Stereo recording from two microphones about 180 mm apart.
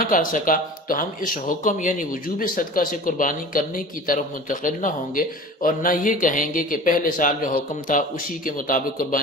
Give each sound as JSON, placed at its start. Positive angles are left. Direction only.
{"t": 0.0, "sound": "speech", "side_deg": 50}